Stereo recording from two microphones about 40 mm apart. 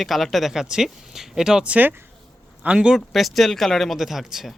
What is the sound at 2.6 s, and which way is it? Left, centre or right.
Speech, right.